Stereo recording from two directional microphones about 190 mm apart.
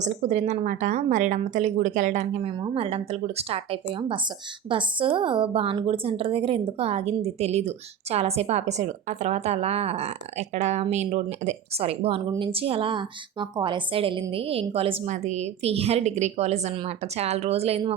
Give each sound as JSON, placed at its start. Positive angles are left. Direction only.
{"t": 0.0, "sound": "a woman's voice", "side_deg": -35}